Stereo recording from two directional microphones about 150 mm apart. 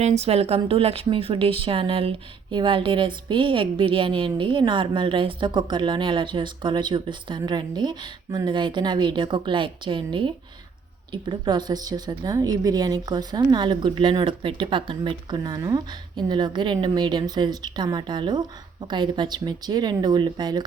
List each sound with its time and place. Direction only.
0.0 s a woman's voice: 45° right (ahead or behind); by 20.7 s 30° right (ahead or behind)